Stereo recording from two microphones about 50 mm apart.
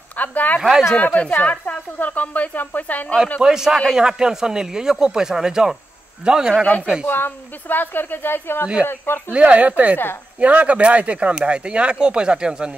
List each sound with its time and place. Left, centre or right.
0.2 s a sound: left
0.6 s speech: centre
0.9 s a woman's voice: left
3.3 s speech: centre
7.1 s speech: left
9.3 s speech: right